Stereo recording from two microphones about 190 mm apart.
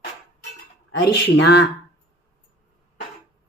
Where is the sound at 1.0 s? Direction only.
60° left (ahead or behind).